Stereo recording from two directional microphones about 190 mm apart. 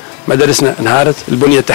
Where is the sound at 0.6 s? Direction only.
15° left (ahead or behind).